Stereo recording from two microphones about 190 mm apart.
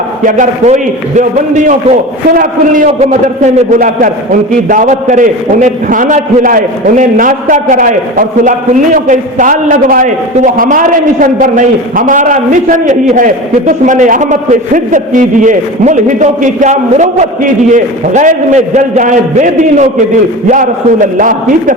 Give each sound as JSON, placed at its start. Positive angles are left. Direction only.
{"t": 0.3, "sound": "a man's voice", "side_deg": -40}